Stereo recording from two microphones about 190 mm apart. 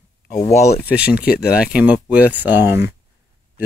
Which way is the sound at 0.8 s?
5° right (ahead or behind).